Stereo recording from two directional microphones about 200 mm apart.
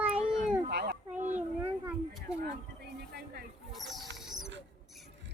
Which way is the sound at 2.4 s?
50° right (ahead or behind).